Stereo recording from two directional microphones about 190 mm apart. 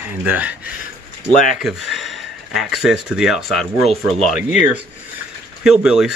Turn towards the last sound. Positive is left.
turn(degrees=-5)  # may be behind; listen again after turning